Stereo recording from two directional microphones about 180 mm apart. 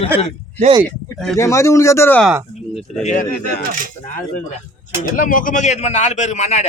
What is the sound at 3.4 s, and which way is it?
Speech, 65° left (ahead or behind).